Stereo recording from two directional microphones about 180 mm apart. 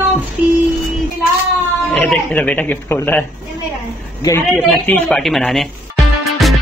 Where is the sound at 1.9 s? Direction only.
5° left (ahead or behind).